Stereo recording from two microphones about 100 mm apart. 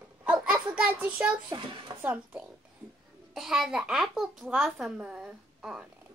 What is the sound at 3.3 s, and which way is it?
A child's voice, 5° right (ahead or behind).